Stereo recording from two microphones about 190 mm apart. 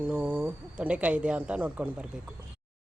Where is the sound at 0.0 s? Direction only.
5° right (ahead or behind).